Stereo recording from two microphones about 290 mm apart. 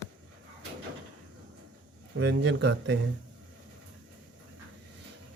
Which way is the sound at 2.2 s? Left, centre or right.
Right.